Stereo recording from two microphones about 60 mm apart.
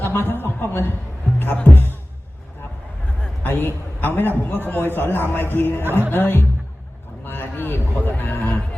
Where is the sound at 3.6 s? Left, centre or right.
Left.